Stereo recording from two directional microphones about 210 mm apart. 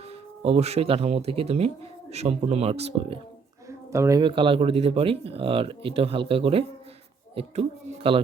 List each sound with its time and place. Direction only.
0.1 s speech: 30° right (ahead or behind)
3.7 s speech: 15° right (ahead or behind)